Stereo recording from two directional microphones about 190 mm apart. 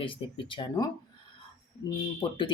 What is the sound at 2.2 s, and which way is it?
Speech, 25° left (ahead or behind).